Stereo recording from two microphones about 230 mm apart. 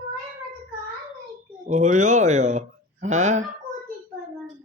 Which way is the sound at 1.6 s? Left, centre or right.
Right.